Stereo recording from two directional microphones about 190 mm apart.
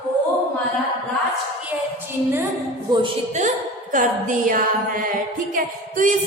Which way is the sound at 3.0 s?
40° right (ahead or behind).